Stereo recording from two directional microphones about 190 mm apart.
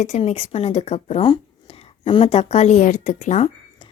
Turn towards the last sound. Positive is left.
turn(degrees=35)  # may be behind; listen again after turning